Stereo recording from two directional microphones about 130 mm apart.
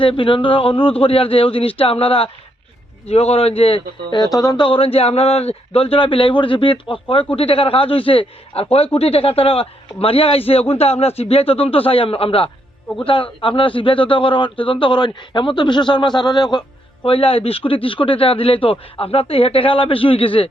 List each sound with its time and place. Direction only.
0.0 s a man's voice: 40° left (ahead or behind)